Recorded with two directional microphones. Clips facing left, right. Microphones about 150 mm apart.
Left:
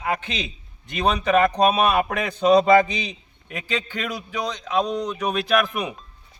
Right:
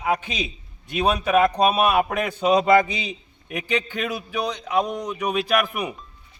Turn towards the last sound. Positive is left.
turn(degrees=-10)  # may be behind; listen again after turning